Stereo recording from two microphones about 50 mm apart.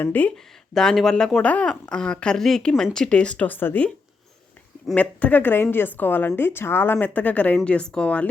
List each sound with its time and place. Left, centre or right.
0.0 s speech: left
0.7 s speech: centre
3.4 s speech: left
4.9 s a woman's voice: left
7.1 s a woman's voice: left